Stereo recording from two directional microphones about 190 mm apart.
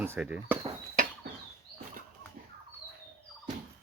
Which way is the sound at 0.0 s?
10° right (ahead or behind).